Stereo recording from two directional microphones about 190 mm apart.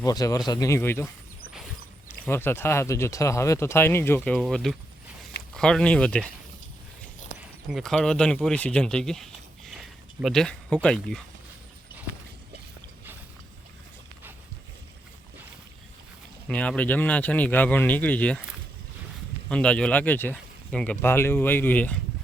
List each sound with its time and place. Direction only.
0.0 s speech: 20° left (ahead or behind)
2.0 s speech: 10° left (ahead or behind)
7.7 s speech: centre (ahead or behind)
16.5 s speech: 5° left (ahead or behind)
19.5 s speech: 5° left (ahead or behind)